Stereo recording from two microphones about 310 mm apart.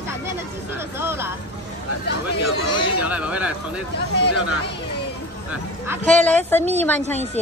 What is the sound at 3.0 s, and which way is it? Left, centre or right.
Speech, centre.